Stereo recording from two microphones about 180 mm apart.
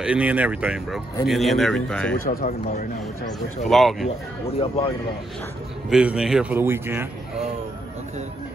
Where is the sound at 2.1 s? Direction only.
50° left (ahead or behind).